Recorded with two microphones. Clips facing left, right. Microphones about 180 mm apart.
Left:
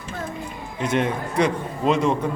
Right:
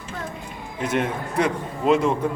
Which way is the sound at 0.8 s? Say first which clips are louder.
Left 1 dB; 5° right (ahead or behind).